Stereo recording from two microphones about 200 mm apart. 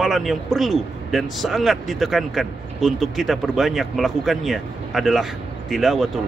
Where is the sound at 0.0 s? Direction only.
Centre (ahead or behind).